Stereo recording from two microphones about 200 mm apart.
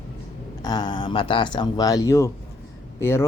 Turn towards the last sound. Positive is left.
turn(degrees=15)  # may be behind; listen again after turning